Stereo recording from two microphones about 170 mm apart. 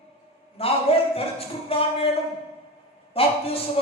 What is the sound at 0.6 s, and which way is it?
Speech, 35° left (ahead or behind).